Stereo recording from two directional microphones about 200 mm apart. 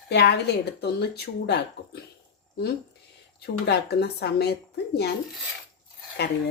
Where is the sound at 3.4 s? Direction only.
55° left (ahead or behind).